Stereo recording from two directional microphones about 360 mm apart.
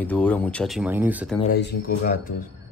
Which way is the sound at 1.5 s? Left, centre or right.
Left.